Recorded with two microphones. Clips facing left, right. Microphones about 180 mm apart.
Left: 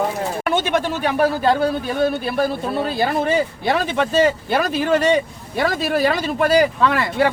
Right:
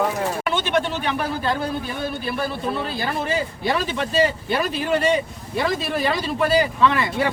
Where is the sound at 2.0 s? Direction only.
45° left (ahead or behind).